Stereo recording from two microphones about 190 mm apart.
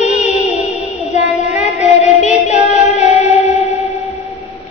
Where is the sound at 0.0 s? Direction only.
35° left (ahead or behind).